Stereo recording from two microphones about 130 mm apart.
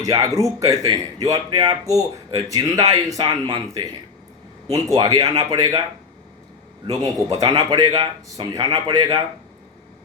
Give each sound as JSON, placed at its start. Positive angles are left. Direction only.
{"t": 0.0, "sound": "speech", "side_deg": -30}
{"t": 4.9, "sound": "speech", "side_deg": -30}
{"t": 6.9, "sound": "speech", "side_deg": -30}